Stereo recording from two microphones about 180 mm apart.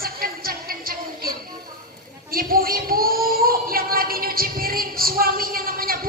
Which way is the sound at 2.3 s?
55° right (ahead or behind).